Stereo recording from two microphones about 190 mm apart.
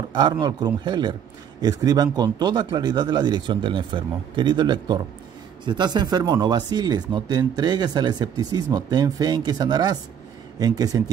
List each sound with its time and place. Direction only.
0.1 s speech: 20° right (ahead or behind)